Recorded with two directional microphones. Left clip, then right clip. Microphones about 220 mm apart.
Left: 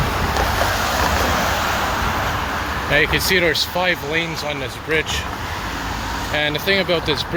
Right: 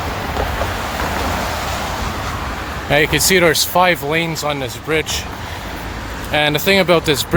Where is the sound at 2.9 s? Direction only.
30° right (ahead or behind).